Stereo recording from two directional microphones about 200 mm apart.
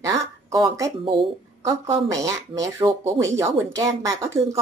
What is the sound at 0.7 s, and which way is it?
A woman's voice, 20° right (ahead or behind).